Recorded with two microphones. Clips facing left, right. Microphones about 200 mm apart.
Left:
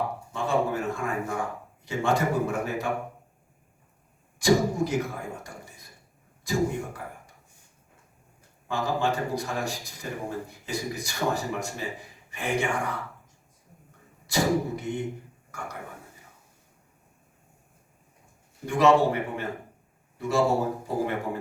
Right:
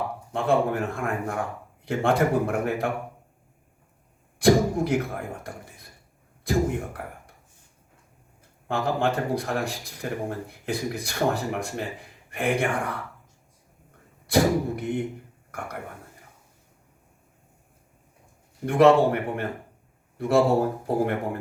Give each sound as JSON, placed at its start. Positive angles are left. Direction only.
{"t": 0.3, "sound": "speech", "side_deg": -60}
{"t": 4.4, "sound": "speech", "side_deg": -60}
{"t": 6.4, "sound": "speech", "side_deg": -60}
{"t": 8.6, "sound": "speech", "side_deg": -55}
{"t": 14.3, "sound": "speech", "side_deg": -60}
{"t": 18.6, "sound": "a man's voice", "side_deg": -60}